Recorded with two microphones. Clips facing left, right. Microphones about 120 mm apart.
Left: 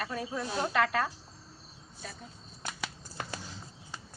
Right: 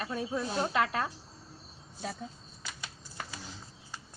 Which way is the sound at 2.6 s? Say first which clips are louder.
Left 4 dB; 50° left (ahead or behind).